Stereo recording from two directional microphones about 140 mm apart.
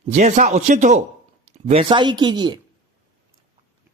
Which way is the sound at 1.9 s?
35° right (ahead or behind).